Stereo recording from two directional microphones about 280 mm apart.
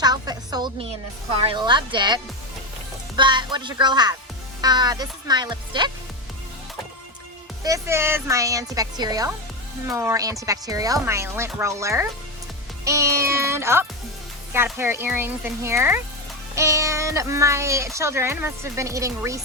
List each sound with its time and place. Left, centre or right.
0.0 s a sound: centre
1.5 s speech: centre
7.6 s speech: centre
12.8 s music: centre
14.5 s speech: centre